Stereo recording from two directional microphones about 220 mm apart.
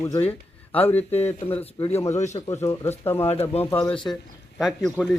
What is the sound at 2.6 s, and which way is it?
Speech, 10° left (ahead or behind).